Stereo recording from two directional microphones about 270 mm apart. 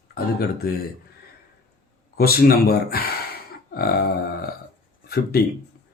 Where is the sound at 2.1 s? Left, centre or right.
Left.